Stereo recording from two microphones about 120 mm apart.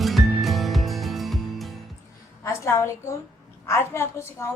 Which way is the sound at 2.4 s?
25° left (ahead or behind).